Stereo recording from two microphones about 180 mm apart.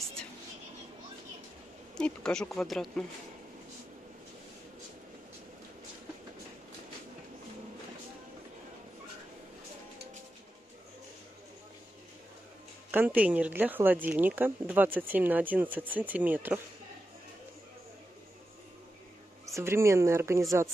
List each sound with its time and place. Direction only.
2.0 s speech: 5° left (ahead or behind)
12.9 s speech: 10° right (ahead or behind)
19.4 s speech: 15° right (ahead or behind)